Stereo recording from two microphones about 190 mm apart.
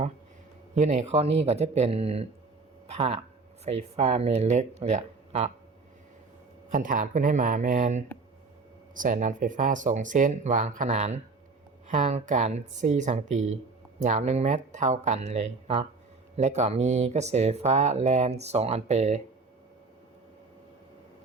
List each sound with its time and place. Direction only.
0.8 s speech: 35° right (ahead or behind)
6.7 s speech: 45° right (ahead or behind)